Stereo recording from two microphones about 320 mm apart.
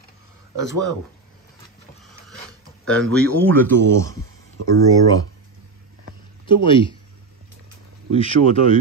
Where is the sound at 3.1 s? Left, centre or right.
Centre.